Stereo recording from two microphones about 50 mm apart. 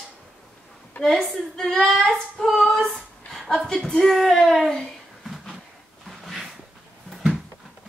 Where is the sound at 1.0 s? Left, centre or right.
Centre.